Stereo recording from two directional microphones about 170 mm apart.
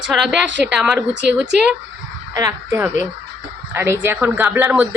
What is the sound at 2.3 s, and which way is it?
Speech, 20° right (ahead or behind).